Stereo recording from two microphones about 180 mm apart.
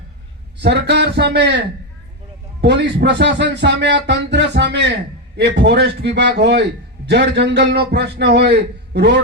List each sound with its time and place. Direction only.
0.6 s a man's voice: 70° right (ahead or behind)
2.6 s a man's voice: 70° right (ahead or behind)